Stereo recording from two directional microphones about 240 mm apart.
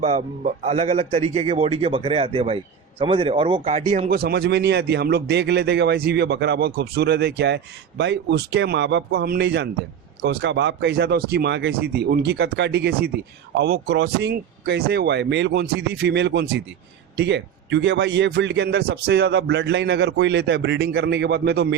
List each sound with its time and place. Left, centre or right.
0.0 s a man's voice: right